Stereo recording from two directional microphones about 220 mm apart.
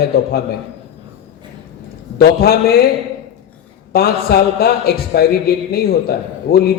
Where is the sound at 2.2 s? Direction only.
45° left (ahead or behind).